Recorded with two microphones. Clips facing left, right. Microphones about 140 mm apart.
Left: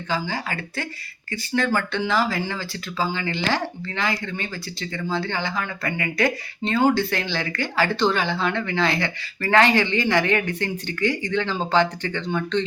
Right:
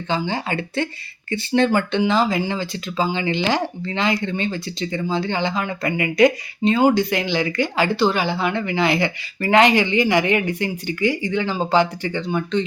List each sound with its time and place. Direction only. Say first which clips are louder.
0.1 s speech: right 4 dB; 25° right (ahead or behind)